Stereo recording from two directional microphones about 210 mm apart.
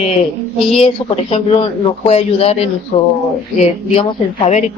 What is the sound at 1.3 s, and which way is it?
A woman's voice, 25° left (ahead or behind).